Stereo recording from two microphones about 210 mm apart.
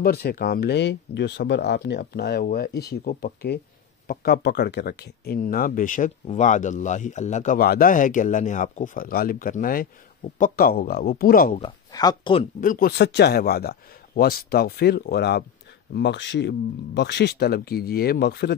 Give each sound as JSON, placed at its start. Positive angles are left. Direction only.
{"t": 0.0, "sound": "speech", "side_deg": 45}
{"t": 11.5, "sound": "speech", "side_deg": 20}
{"t": 12.5, "sound": "speech", "side_deg": 40}